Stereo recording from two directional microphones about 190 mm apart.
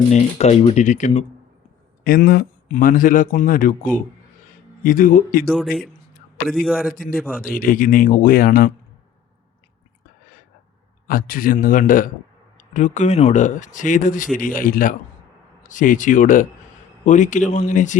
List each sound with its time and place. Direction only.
0.1 s speech: 35° left (ahead or behind)
2.0 s speech: 50° left (ahead or behind)
6.5 s a man's voice: 5° right (ahead or behind)
6.9 s speech: 45° left (ahead or behind)
11.1 s speech: 45° left (ahead or behind)